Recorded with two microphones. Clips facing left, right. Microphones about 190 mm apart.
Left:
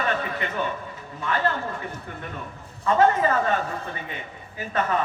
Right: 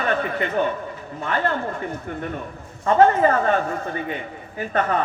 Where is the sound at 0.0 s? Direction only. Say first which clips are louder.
Right 4 dB; 45° right (ahead or behind).